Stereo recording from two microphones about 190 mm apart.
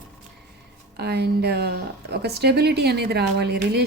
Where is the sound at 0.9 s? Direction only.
60° right (ahead or behind).